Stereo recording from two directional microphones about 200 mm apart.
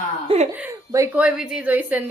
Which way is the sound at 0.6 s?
10° right (ahead or behind).